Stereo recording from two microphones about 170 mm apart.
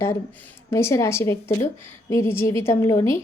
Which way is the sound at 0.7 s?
15° left (ahead or behind).